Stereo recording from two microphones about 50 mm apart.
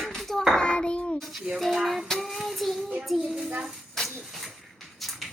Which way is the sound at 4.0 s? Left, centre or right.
Centre.